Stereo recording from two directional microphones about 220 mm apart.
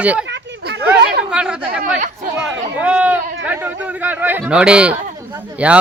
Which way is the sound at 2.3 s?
5° right (ahead or behind).